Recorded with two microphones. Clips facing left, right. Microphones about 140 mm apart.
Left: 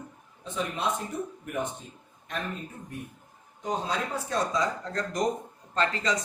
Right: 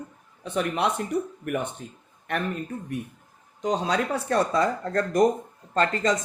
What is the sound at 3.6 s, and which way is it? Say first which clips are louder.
A man's voice: right 5 dB; 80° right.